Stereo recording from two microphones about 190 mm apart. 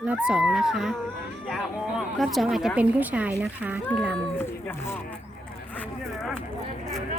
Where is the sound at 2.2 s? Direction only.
Centre (ahead or behind).